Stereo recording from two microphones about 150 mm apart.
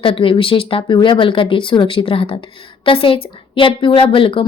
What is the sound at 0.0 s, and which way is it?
A woman's voice, 35° left (ahead or behind).